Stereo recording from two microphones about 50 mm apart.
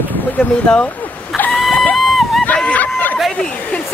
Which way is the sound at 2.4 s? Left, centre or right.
Left.